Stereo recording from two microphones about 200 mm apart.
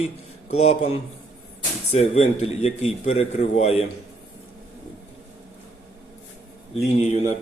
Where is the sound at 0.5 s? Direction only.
30° left (ahead or behind).